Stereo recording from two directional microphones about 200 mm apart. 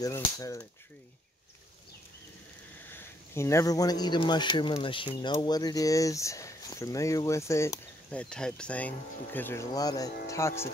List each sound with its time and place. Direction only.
0.0 s speech: 15° left (ahead or behind)
2.9 s speech: 10° left (ahead or behind)